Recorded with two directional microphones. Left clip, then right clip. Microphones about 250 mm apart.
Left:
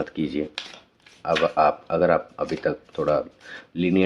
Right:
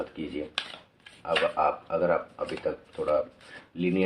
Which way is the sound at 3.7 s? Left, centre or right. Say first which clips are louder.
Left 6 dB; left.